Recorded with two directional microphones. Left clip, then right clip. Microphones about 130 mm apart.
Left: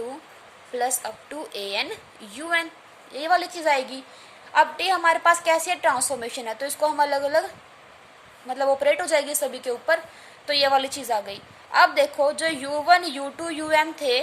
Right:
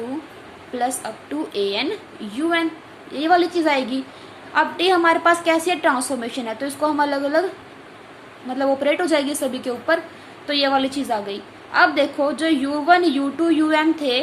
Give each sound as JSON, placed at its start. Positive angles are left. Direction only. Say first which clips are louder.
{"t": 0.8, "sound": "a woman's voice", "louder": "right 2 dB", "side_deg": 50}
{"t": 8.4, "sound": "a woman's voice", "louder": "right 1 dB", "side_deg": 45}